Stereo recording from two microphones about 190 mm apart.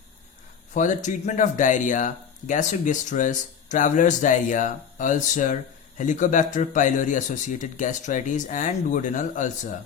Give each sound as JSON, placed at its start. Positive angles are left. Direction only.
{"t": 0.7, "sound": "speech", "side_deg": 40}